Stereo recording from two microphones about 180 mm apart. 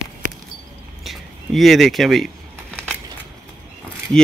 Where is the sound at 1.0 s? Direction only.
Centre (ahead or behind).